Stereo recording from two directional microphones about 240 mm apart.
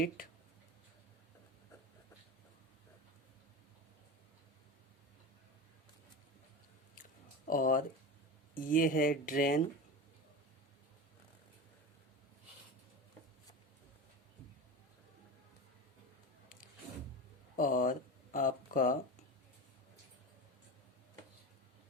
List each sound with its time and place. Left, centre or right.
7.4 s speech: left
17.6 s speech: left